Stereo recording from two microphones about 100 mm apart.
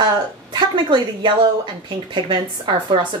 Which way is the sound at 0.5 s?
50° right (ahead or behind).